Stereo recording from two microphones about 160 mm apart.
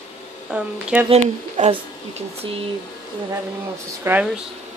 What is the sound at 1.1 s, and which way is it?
Speech, 40° right (ahead or behind).